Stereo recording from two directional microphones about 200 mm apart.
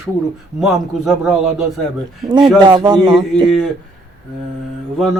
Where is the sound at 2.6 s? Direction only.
20° right (ahead or behind).